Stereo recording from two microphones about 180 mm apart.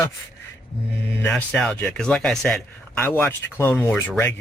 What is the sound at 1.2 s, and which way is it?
A man's voice, 10° left (ahead or behind).